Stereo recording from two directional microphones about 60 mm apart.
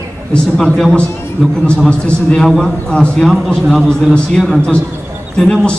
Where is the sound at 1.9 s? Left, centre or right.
Centre.